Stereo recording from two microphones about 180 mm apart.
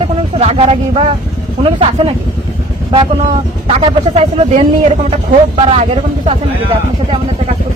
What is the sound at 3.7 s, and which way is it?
A man's voice, 35° right (ahead or behind).